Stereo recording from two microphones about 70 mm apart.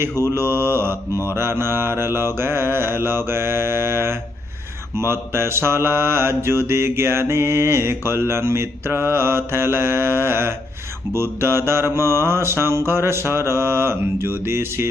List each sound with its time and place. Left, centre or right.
0.0 s mantra: right